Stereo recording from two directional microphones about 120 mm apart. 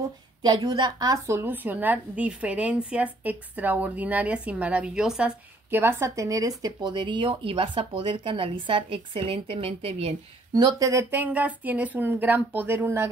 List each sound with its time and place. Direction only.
0.4 s a woman's voice: 35° right (ahead or behind); by 5.3 s 5° right (ahead or behind)
5.7 s speech: 20° right (ahead or behind); by 10.1 s 55° right (ahead or behind)
10.5 s a woman's voice: 35° right (ahead or behind)